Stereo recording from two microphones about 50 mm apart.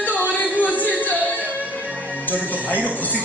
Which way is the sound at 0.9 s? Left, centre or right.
Left.